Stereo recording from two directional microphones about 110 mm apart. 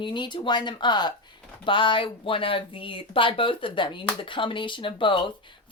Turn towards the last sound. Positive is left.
turn(degrees=50)  # may be behind; listen again after turning